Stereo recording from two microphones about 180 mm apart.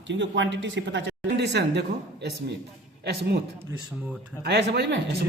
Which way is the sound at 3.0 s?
65° right (ahead or behind).